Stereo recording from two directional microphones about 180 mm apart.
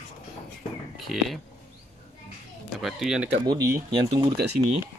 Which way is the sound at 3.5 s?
20° right (ahead or behind).